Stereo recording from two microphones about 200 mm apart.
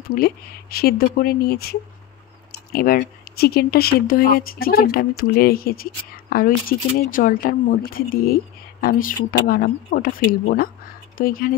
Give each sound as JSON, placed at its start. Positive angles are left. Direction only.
{"t": 0.1, "sound": "speech", "side_deg": 50}